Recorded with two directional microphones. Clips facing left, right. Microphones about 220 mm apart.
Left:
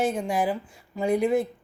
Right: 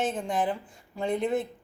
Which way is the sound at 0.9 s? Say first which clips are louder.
Left 5 dB; 10° left (ahead or behind).